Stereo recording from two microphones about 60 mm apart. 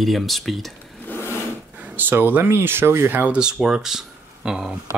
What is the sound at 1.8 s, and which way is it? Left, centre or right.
Speech, right.